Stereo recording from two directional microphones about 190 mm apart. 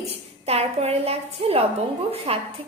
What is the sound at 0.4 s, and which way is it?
A woman's voice, 35° right (ahead or behind).